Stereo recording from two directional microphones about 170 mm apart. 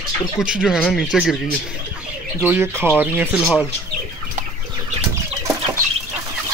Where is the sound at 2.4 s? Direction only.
10° right (ahead or behind).